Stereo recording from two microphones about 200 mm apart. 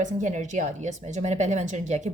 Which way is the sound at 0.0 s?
35° right (ahead or behind).